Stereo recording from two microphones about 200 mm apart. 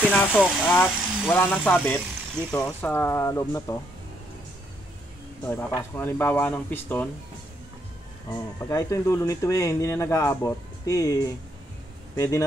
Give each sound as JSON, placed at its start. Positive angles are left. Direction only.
{"t": 0.1, "sound": "speech", "side_deg": 10}
{"t": 5.5, "sound": "speech", "side_deg": 15}
{"t": 8.3, "sound": "speech", "side_deg": 15}